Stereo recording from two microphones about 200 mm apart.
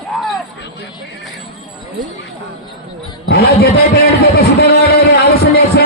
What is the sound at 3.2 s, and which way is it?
Speech, 55° left (ahead or behind).